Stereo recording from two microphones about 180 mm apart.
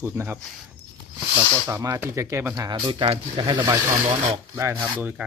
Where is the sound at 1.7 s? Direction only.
15° right (ahead or behind).